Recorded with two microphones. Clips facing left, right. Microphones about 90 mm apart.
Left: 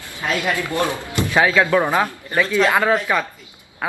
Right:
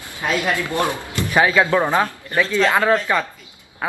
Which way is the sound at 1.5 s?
15° right (ahead or behind).